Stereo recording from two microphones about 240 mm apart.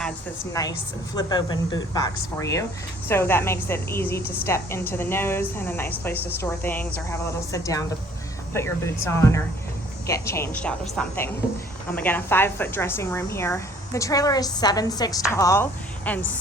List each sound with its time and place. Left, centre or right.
0.6 s a woman's voice: centre